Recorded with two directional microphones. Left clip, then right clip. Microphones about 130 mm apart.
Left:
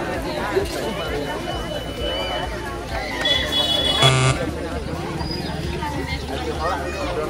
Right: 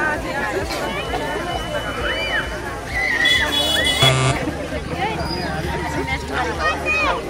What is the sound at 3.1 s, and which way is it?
Music, 25° right (ahead or behind).